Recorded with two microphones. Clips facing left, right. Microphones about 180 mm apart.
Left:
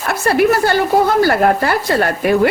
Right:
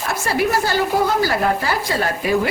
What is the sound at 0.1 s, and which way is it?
Speech, 60° left (ahead or behind).